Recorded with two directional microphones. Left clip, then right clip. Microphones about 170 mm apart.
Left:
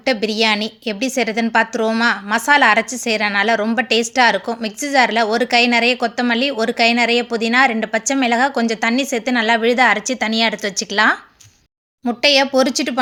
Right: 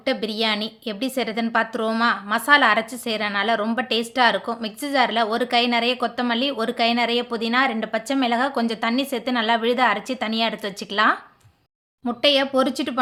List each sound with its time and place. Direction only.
0.0 s a woman's voice: 15° left (ahead or behind)